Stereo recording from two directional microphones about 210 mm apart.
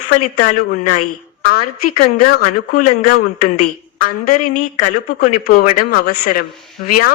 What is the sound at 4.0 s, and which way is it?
Speech, 45° left (ahead or behind).